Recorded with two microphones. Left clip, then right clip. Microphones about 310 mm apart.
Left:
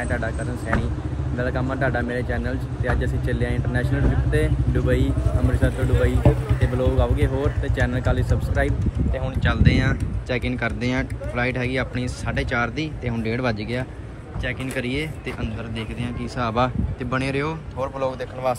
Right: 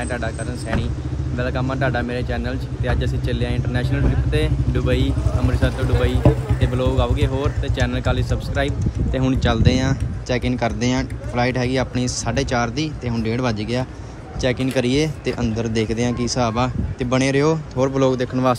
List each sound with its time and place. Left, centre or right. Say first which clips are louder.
1.4 s speech: right 2 dB; centre
17.7 s speech: right 4 dB; right